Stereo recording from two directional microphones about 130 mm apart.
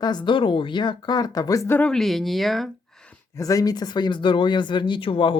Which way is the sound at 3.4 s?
25° left (ahead or behind).